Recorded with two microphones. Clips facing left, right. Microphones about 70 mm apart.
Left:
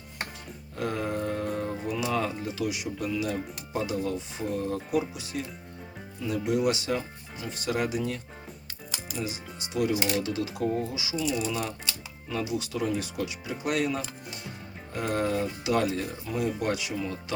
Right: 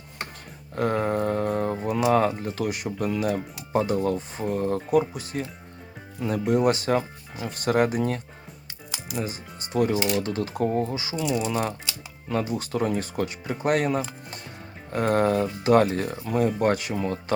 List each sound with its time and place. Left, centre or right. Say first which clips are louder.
0.8 s mantra: right 6 dB; right
2.1 s speech: right 6 dB; right
9.2 s speech: right 1 dB; right